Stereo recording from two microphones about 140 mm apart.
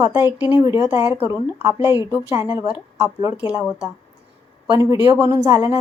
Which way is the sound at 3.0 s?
20° right (ahead or behind).